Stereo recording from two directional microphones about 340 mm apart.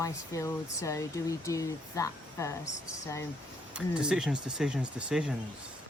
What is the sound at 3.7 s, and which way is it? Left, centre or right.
Speech, centre.